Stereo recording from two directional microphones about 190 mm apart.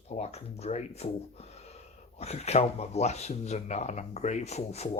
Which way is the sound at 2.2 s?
35° left (ahead or behind).